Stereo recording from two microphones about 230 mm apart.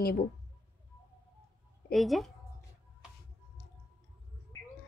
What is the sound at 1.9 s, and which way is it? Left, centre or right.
Speech, centre.